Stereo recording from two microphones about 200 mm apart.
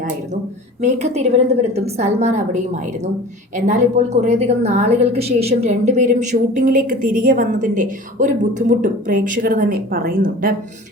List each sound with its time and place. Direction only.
0.8 s a woman's voice: 35° right (ahead or behind)